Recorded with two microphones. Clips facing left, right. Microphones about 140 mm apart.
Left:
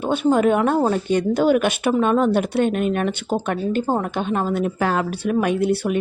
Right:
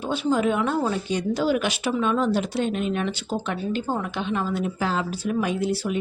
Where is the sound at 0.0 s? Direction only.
55° left (ahead or behind).